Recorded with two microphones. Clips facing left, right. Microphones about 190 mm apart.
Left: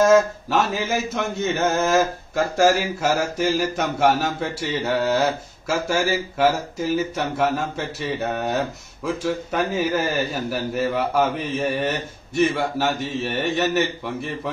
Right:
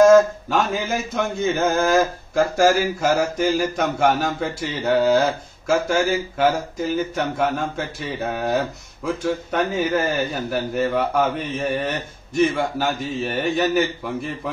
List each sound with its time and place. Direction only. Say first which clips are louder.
0.0 s speech: right 4 dB; 5° left (ahead or behind)